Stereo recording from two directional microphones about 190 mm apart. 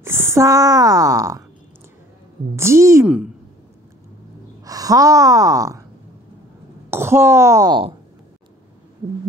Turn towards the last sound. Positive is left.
turn(degrees=-25)  # may be behind; listen again after turning